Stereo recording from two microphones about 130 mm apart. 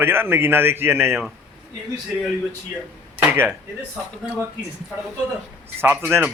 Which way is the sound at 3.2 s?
15° right (ahead or behind).